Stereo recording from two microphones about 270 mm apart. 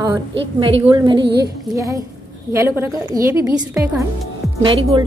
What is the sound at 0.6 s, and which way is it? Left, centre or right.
A woman's voice, centre.